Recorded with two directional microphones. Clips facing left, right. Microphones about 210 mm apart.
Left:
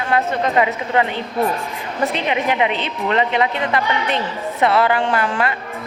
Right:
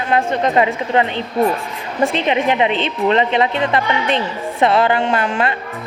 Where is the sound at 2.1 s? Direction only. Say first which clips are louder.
Right 3 dB; 25° right (ahead or behind).